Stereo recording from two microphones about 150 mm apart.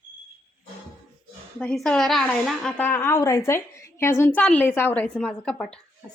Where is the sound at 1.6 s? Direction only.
5° left (ahead or behind).